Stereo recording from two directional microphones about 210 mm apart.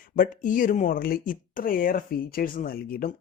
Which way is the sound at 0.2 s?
40° left (ahead or behind).